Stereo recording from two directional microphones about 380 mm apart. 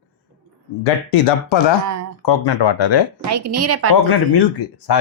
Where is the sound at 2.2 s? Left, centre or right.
Left.